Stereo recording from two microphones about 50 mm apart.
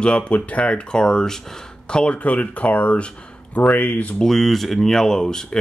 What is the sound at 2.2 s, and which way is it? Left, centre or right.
Speech, left.